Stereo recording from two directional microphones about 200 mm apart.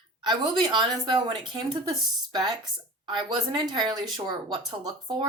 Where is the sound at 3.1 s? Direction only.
20° right (ahead or behind).